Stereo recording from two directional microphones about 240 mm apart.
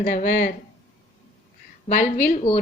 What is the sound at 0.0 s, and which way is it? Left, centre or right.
Speech, left.